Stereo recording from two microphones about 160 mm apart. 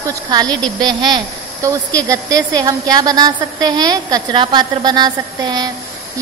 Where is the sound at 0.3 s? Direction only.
25° right (ahead or behind).